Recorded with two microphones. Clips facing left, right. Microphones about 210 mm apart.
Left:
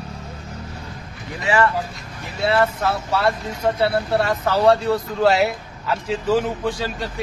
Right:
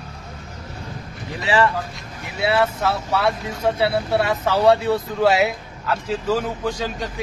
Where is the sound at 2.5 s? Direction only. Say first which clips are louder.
Left 1 dB; 5° right (ahead or behind).